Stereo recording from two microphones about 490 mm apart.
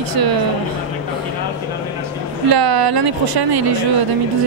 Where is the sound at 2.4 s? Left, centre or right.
Right.